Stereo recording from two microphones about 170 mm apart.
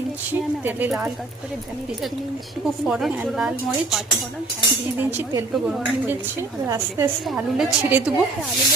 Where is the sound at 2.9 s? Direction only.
5° right (ahead or behind).